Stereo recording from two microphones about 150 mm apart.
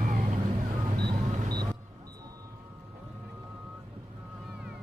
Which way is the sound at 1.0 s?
90° right.